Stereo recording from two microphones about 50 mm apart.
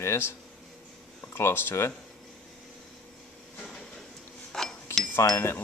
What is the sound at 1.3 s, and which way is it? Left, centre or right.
Speech, left.